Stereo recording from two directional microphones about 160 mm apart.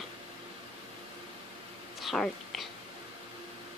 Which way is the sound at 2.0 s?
Centre (ahead or behind).